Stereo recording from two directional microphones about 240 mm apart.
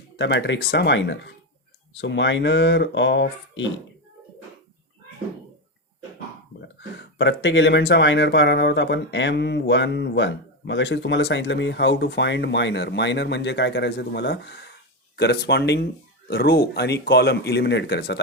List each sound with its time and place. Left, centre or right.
0.2 s speech: left
6.7 s speech: left